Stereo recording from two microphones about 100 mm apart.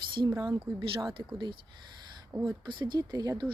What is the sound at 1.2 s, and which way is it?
Speech, 35° right (ahead or behind).